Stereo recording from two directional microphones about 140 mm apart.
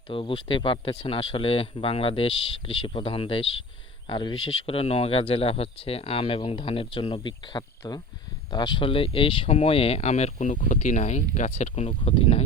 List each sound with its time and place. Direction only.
0.1 s speech: 40° left (ahead or behind)
10.5 s speech: 65° left (ahead or behind); by 12.4 s 45° left (ahead or behind)